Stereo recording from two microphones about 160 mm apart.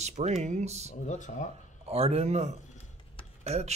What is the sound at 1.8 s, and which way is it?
Speech, 40° right (ahead or behind).